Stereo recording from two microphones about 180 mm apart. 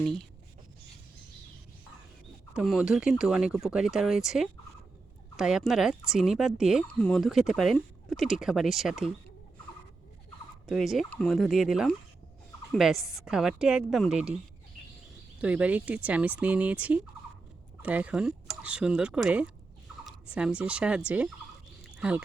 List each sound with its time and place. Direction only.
0.0 s speech: centre (ahead or behind)
2.5 s speech: 5° right (ahead or behind)
10.7 s speech: centre (ahead or behind)
15.4 s speech: 5° right (ahead or behind)